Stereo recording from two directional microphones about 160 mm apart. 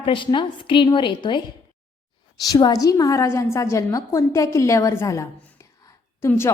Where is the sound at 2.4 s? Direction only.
20° left (ahead or behind).